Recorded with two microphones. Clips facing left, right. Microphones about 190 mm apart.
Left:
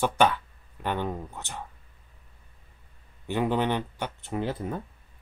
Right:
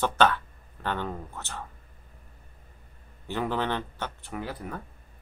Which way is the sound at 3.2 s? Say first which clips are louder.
Left 3 dB; 15° left (ahead or behind).